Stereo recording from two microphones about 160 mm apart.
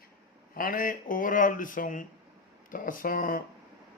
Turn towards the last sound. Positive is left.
turn(degrees=60)  # may be behind; listen again after turning